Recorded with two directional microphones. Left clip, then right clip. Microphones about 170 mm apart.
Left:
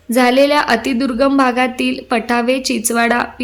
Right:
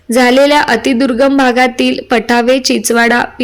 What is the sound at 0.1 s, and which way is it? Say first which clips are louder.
A woman's voice: right 4 dB; 20° right (ahead or behind).